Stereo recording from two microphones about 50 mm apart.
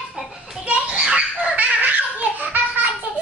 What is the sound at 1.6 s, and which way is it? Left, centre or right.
Baby laughter, right.